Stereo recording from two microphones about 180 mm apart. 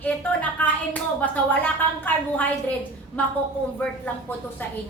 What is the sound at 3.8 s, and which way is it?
Speech, 10° left (ahead or behind).